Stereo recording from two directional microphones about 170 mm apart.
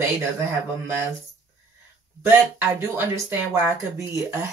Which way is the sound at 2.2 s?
10° right (ahead or behind).